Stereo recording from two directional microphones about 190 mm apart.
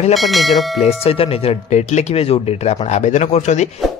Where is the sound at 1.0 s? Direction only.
30° left (ahead or behind).